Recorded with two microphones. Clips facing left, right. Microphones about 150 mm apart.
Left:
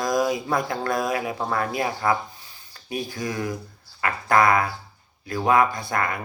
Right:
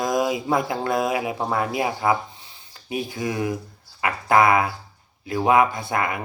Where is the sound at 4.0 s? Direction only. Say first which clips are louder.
Right 2 dB; 15° right (ahead or behind).